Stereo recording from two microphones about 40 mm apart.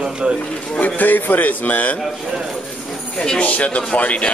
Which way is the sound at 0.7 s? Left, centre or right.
Left.